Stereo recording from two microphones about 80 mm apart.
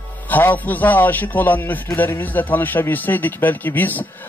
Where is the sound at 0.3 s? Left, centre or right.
Left.